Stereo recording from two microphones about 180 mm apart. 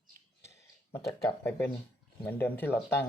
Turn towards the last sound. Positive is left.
turn(degrees=10)  # may be behind; listen again after turning